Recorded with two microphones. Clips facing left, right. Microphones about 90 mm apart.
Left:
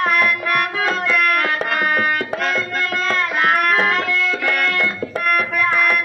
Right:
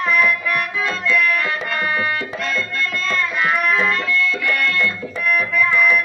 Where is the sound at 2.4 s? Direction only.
55° left (ahead or behind).